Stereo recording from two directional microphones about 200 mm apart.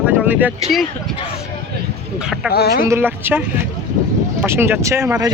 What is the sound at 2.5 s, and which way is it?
Speech, 50° left (ahead or behind).